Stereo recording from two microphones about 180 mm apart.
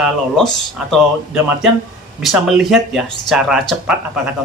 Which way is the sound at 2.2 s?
Centre (ahead or behind).